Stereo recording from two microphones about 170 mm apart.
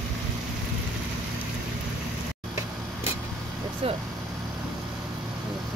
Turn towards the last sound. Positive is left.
turn(degrees=-35)  # may be behind; listen again after turning